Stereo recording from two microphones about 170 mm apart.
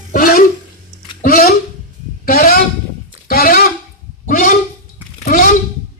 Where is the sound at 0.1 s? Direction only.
60° left (ahead or behind).